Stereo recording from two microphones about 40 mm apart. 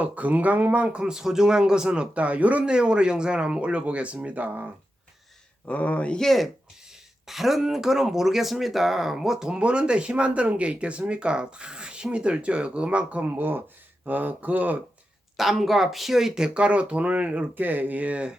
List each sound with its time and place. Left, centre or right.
0.0 s speech: right
0.9 s speech: right
2.1 s speech: right
2.6 s speech: right
5.6 s speech: left
6.1 s speech: centre
7.3 s speech: centre
9.5 s speech: right
15.4 s speech: centre
16.6 s speech: right
17.5 s speech: right